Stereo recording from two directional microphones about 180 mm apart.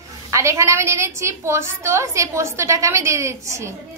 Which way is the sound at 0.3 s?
15° right (ahead or behind).